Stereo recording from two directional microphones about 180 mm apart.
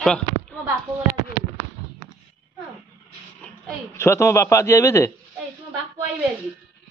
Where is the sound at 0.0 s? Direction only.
5° left (ahead or behind).